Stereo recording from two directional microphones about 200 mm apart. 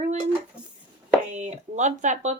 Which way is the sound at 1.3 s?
35° right (ahead or behind).